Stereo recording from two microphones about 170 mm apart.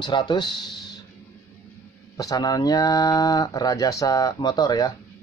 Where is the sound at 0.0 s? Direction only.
25° left (ahead or behind).